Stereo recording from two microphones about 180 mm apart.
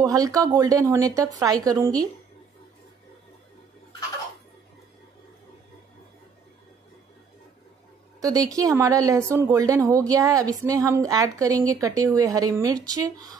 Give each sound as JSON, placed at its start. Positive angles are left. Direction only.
{"t": 0.0, "sound": "speech", "side_deg": -20}
{"t": 8.2, "sound": "speech", "side_deg": -20}